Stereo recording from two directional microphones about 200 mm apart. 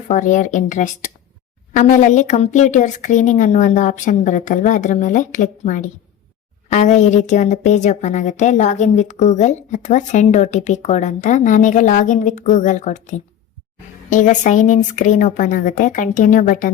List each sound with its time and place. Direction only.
0.1 s a woman's voice: 40° left (ahead or behind)